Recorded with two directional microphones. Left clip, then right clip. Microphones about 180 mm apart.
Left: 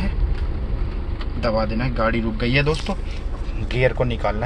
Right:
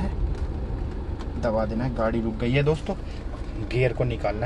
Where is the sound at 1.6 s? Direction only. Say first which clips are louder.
Left 4 dB; 15° right (ahead or behind).